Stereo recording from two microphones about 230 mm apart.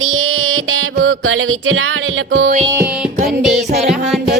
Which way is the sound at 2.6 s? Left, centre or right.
Centre.